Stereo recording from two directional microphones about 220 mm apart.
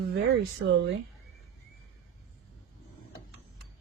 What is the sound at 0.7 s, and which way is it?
Speech, 55° right (ahead or behind).